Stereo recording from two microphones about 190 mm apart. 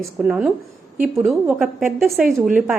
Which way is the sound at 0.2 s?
5° right (ahead or behind).